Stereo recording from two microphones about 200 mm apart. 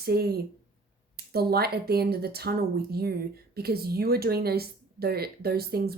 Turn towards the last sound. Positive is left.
turn(degrees=-50)  # may be behind; listen again after turning